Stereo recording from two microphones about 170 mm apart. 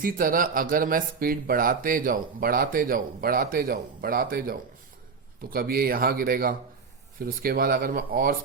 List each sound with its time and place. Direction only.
0.0 s speech: 55° right (ahead or behind)